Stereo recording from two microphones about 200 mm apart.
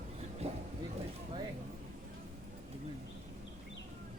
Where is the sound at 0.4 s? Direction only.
30° right (ahead or behind).